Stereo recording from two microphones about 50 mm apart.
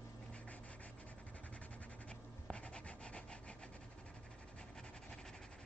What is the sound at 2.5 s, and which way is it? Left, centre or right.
Rub, left.